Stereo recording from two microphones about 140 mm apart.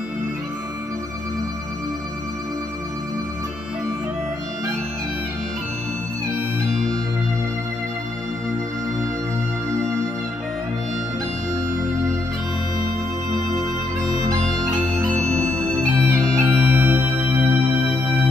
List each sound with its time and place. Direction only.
6.7 s music: 5° left (ahead or behind)
15.1 s music: 55° right (ahead or behind)
16.1 s music: 15° right (ahead or behind)